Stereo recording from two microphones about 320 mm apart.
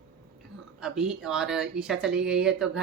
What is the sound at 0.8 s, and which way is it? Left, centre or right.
Speech, centre.